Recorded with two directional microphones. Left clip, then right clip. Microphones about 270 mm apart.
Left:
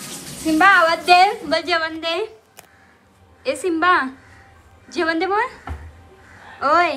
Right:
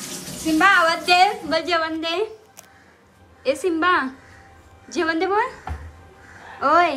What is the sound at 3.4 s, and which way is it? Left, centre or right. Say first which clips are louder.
A woman's voice: left 2 dB; centre.